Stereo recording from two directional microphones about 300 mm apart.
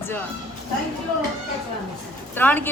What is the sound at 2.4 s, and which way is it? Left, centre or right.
Speech, centre.